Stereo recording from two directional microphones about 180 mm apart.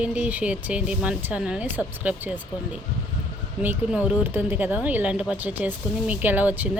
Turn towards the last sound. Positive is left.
turn(degrees=-10)  # may be behind; listen again after turning